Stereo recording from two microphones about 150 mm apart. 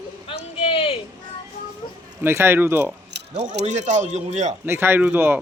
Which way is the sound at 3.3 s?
50° right (ahead or behind).